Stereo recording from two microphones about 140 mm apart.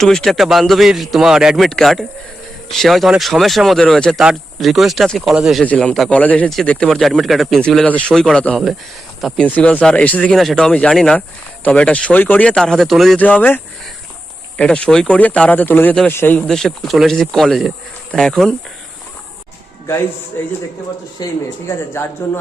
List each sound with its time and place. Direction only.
0.0 s speech: 5° left (ahead or behind)
14.6 s speech: 5° left (ahead or behind)
16.4 s speech: centre (ahead or behind)
21.2 s speech: 30° left (ahead or behind)
22.2 s speech: 15° left (ahead or behind)